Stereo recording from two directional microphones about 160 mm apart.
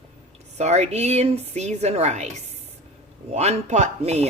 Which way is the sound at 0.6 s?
45° right (ahead or behind).